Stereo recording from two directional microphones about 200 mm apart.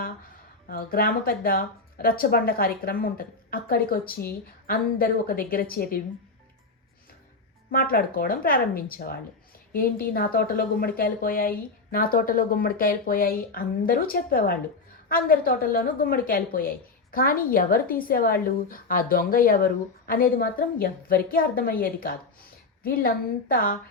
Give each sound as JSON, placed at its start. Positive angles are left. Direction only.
{"t": 0.7, "sound": "a woman's voice", "side_deg": 45}
{"t": 7.7, "sound": "a woman's voice", "side_deg": 45}